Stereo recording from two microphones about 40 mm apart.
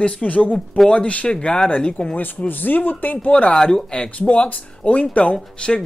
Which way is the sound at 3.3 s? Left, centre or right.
Left.